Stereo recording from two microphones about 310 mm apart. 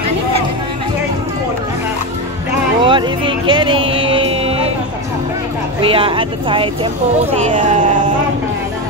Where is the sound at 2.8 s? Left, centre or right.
Centre.